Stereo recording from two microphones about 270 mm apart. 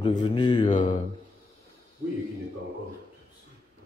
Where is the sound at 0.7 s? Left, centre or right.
Left.